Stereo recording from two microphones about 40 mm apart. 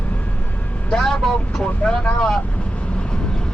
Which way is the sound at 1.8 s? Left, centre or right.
Left.